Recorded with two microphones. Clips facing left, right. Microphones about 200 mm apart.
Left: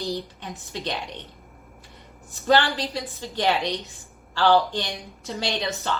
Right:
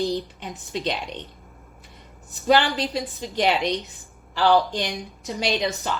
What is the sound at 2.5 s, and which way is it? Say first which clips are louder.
A woman's voice: right 1 dB; 15° right (ahead or behind).